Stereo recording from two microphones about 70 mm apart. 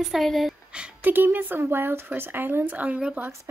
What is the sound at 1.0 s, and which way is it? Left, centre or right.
Speech, right.